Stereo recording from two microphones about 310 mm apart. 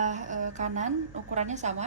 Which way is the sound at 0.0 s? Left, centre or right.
Right.